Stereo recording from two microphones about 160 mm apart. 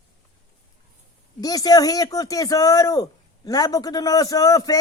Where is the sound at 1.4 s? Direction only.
25° left (ahead or behind).